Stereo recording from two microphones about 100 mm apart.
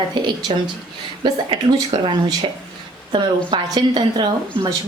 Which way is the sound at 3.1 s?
50° right (ahead or behind).